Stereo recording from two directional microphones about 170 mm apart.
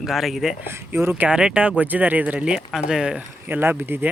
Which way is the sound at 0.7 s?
15° right (ahead or behind).